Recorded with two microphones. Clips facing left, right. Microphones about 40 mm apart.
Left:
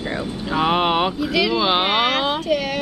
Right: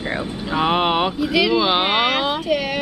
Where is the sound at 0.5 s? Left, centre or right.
Centre.